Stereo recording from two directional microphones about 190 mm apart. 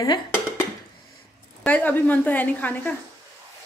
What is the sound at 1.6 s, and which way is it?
Speech, 10° left (ahead or behind).